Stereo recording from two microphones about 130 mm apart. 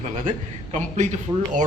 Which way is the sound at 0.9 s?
70° right (ahead or behind).